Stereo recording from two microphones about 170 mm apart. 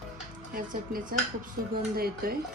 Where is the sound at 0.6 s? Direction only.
55° right (ahead or behind).